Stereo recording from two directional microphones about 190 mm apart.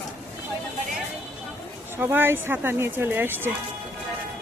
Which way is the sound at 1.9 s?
10° right (ahead or behind).